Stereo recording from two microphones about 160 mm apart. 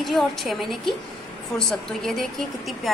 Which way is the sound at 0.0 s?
Centre (ahead or behind).